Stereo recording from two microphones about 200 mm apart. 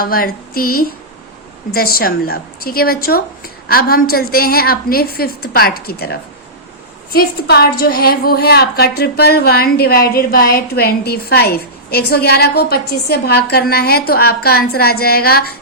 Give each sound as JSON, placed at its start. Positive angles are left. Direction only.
{"t": 0.0, "sound": "a woman's voice", "side_deg": 45}